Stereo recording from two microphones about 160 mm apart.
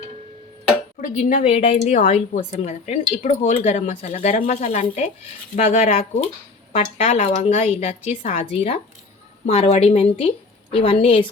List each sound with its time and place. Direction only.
1.0 s a woman's voice: 55° left (ahead or behind); by 11.3 s 35° left (ahead or behind)